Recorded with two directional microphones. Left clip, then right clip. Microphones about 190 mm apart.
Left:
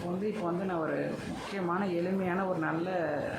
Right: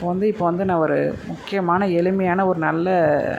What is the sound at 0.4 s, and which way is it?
Speech, 35° right (ahead or behind).